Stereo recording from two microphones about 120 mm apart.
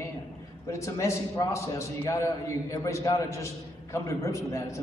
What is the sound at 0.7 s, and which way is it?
A man's voice, 25° left (ahead or behind).